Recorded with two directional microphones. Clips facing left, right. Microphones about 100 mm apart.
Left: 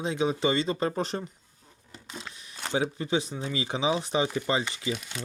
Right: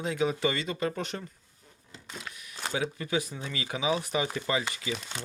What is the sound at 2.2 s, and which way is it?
Camera, 30° left (ahead or behind).